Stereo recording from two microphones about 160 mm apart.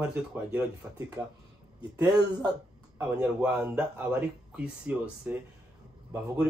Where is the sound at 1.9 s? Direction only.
25° right (ahead or behind).